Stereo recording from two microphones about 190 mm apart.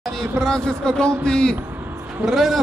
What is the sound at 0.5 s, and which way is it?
A man's voice, 5° left (ahead or behind).